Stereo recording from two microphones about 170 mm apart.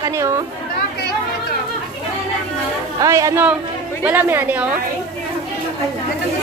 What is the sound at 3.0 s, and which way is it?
A woman's voice, 20° right (ahead or behind).